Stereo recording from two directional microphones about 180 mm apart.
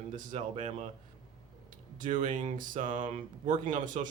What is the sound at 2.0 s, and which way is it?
Speech, 45° right (ahead or behind).